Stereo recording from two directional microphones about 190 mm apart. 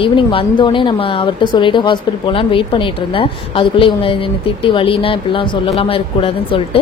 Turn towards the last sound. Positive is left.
turn(degrees=30)  # may be behind; listen again after turning